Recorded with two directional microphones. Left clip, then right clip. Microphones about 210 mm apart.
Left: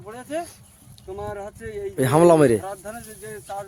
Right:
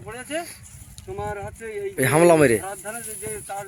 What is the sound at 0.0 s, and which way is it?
Speech, centre (ahead or behind).